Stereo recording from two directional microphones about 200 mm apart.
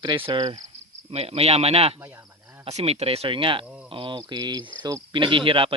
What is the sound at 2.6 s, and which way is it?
Speech, 30° right (ahead or behind).